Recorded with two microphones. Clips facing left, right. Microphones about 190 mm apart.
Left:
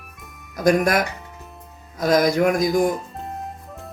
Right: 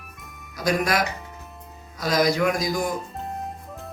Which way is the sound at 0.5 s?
50° left (ahead or behind).